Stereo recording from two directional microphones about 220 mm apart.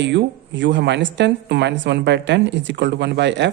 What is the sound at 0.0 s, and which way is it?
Speech, 55° right (ahead or behind).